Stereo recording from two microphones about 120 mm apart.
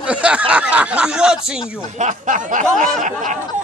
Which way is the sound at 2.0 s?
90° right.